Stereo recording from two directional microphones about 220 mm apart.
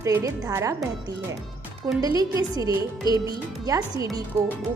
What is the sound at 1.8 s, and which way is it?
Speech, 15° right (ahead or behind).